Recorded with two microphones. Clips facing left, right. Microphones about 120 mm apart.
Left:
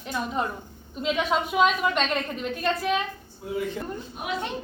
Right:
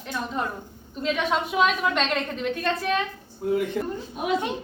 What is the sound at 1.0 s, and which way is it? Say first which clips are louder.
A woman's voice: even; 5° left (ahead or behind).